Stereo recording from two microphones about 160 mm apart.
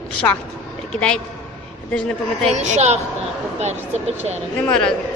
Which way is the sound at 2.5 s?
45° right (ahead or behind).